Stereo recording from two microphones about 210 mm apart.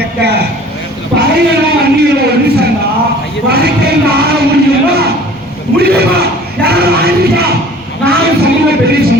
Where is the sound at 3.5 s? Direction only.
50° right (ahead or behind).